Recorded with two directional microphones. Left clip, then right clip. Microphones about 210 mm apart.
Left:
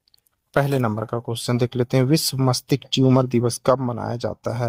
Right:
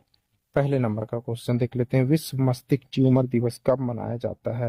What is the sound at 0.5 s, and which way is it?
Speech, 15° left (ahead or behind).